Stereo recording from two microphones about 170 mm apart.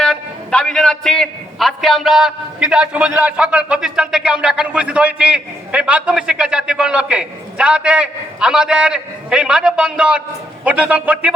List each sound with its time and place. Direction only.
0.0 s a man's voice: 5° left (ahead or behind)